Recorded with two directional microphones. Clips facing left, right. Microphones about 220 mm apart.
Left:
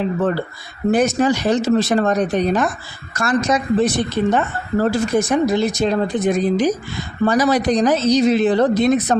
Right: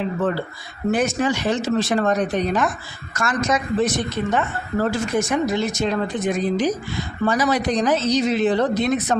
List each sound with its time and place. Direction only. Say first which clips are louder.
0.9 s a woman's voice: left 4 dB; 40° left (ahead or behind)